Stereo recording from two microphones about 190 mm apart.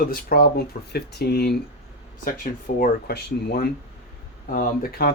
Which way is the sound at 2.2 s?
45° left (ahead or behind).